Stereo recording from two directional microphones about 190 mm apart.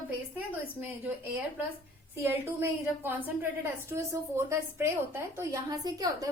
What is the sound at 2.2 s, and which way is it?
A woman's voice, 10° right (ahead or behind).